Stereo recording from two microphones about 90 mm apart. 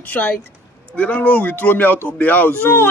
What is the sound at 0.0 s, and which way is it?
Speech, 15° left (ahead or behind).